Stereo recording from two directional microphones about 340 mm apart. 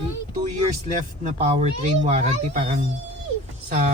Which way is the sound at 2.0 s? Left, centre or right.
Right.